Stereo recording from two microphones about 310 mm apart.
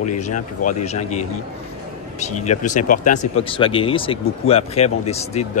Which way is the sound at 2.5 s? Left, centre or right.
Left.